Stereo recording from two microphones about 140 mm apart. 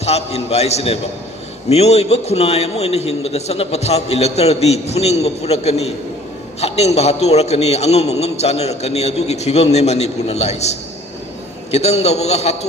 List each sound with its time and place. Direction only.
0.0 s a man's voice: 50° left (ahead or behind)